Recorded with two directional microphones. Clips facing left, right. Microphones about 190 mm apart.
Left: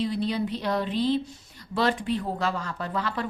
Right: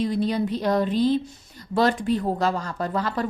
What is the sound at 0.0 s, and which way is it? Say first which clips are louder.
Speech: right 3 dB; 45° right (ahead or behind).